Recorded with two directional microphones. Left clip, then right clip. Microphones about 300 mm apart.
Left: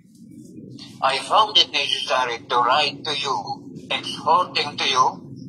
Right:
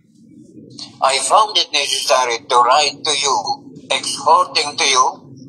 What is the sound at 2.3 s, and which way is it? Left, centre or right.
Speech, right.